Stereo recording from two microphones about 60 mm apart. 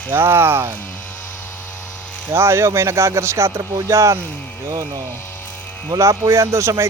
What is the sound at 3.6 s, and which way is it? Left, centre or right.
Speech, right.